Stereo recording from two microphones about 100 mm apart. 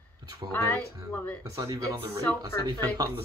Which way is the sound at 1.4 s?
35° right (ahead or behind).